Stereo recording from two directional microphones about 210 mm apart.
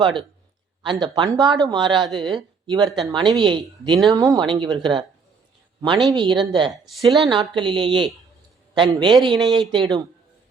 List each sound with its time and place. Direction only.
0.8 s a man's voice: 20° right (ahead or behind)